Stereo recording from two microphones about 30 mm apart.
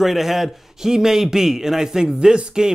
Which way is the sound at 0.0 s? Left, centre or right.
Centre.